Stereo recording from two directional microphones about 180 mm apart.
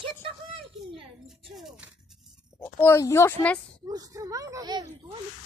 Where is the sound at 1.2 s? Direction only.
Centre (ahead or behind).